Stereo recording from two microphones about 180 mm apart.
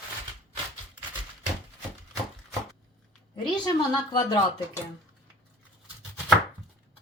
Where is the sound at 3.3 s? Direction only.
25° left (ahead or behind).